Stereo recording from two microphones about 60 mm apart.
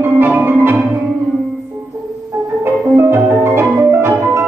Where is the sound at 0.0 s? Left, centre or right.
Right.